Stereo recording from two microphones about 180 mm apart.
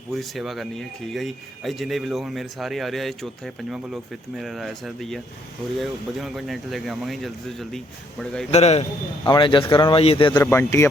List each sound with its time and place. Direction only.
0.1 s speech: centre (ahead or behind)
8.4 s a man's voice: 35° left (ahead or behind)
9.2 s speech: 25° left (ahead or behind)
10.3 s speech: 10° left (ahead or behind)